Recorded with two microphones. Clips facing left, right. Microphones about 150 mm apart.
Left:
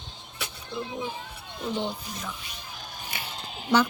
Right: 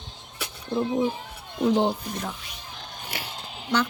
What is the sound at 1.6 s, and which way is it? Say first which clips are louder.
Speech: right 9 dB; 90° right.